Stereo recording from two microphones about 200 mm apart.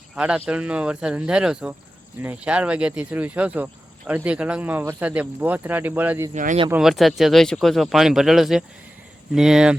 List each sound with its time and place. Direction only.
0.2 s speech: 5° right (ahead or behind)
6.3 s speech: 40° right (ahead or behind)
6.7 s speech: 5° right (ahead or behind)